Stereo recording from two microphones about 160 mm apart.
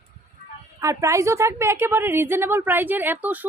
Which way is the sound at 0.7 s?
20° right (ahead or behind).